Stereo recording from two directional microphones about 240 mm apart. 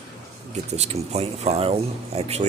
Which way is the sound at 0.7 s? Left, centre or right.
Right.